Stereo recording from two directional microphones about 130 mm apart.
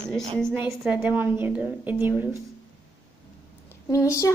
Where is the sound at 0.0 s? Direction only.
5° left (ahead or behind).